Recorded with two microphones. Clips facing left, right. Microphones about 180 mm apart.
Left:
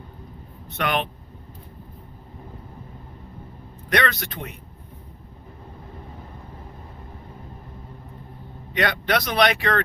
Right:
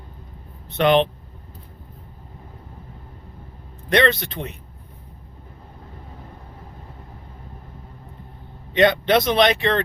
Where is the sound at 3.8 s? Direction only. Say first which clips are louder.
Right 5 dB; 25° right (ahead or behind).